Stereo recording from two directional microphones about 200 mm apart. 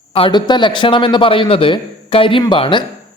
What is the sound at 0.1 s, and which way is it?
Speech, 25° left (ahead or behind).